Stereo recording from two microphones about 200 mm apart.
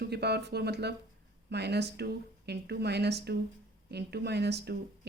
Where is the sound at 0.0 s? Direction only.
55° right (ahead or behind).